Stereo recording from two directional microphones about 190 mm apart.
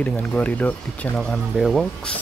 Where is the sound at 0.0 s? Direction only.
10° left (ahead or behind).